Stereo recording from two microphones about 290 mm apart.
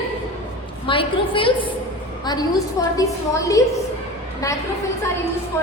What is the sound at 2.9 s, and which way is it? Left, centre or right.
A woman's voice, centre.